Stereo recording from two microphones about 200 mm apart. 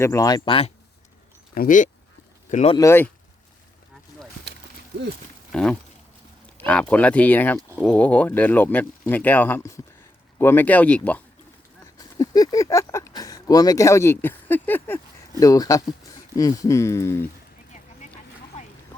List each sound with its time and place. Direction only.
0.0 s speech: 15° left (ahead or behind)
1.5 s speech: 40° left (ahead or behind)
2.7 s speech: 15° left (ahead or behind)
5.5 s speech: 5° left (ahead or behind)
11.9 s speech: 20° left (ahead or behind)
18.0 s a sound: 30° left (ahead or behind)